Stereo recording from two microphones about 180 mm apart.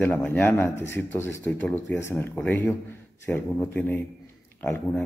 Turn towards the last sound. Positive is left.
turn(degrees=15)  # may be behind; listen again after turning